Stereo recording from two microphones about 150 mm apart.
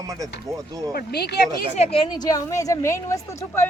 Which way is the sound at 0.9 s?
90° left.